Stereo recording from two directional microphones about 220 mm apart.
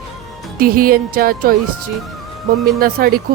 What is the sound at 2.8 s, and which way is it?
Speech, 40° right (ahead or behind).